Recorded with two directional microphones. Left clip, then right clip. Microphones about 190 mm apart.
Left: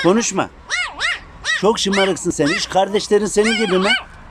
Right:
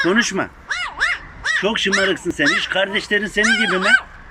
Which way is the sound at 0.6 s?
Centre (ahead or behind).